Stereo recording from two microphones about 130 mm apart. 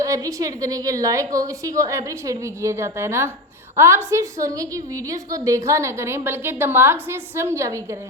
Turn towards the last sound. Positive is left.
turn(degrees=-25)  # may be behind; listen again after turning